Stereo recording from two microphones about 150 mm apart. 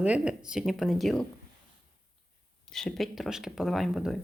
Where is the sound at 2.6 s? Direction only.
5° left (ahead or behind).